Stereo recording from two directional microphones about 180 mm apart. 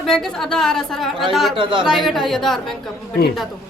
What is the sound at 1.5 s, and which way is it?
Speech, 30° right (ahead or behind).